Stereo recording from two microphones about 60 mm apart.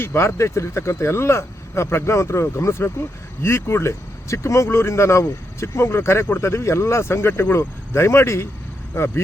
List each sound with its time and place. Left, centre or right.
0.0 s speech: left